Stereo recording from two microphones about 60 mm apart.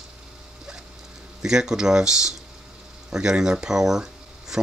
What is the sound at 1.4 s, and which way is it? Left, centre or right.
Speech, centre.